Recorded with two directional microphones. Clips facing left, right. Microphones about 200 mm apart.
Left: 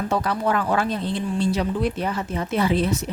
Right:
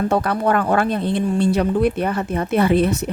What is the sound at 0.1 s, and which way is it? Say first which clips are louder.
Speech: right 4 dB; 55° right (ahead or behind).